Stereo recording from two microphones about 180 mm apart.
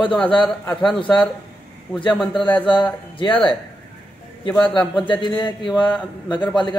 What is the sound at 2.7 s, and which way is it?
Speech, 25° left (ahead or behind).